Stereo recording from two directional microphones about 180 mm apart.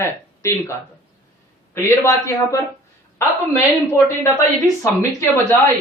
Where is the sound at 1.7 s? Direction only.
15° left (ahead or behind).